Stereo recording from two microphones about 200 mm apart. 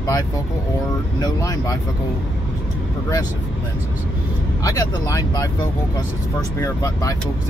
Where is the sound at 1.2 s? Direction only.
20° left (ahead or behind).